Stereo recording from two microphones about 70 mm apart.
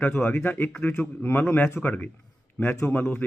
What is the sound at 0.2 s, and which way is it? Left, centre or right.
A man's voice, left.